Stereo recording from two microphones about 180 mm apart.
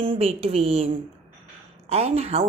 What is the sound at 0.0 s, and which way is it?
A woman's voice, 30° right (ahead or behind).